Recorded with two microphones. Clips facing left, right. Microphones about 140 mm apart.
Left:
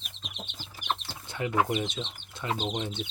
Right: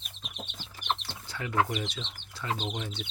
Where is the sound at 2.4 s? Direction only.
20° left (ahead or behind).